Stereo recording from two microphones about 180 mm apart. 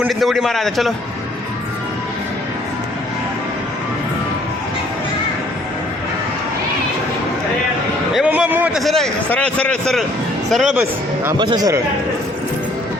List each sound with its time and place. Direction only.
0.0 s a man's voice: centre (ahead or behind)
8.1 s a man's voice: 5° right (ahead or behind)
11.3 s speech: 25° right (ahead or behind)